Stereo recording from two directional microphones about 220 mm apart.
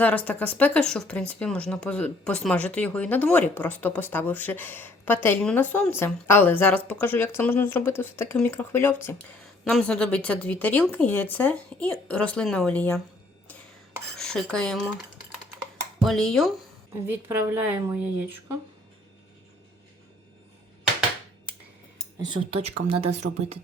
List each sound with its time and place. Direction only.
0.0 s speech: 5° left (ahead or behind)
14.2 s speech: 5° left (ahead or behind)
16.0 s speech: 5° left (ahead or behind)
17.2 s speech: 10° right (ahead or behind)
22.3 s speech: 25° right (ahead or behind)